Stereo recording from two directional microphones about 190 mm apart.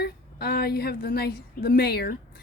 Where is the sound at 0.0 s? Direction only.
55° left (ahead or behind).